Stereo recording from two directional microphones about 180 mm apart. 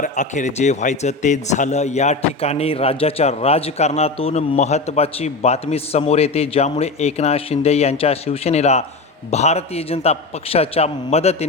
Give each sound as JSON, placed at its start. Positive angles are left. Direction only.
{"t": 0.0, "sound": "a man's voice", "side_deg": 45}